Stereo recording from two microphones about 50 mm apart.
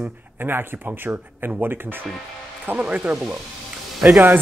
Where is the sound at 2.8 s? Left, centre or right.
Right.